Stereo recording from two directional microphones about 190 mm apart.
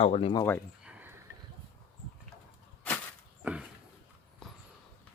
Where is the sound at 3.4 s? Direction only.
5° right (ahead or behind).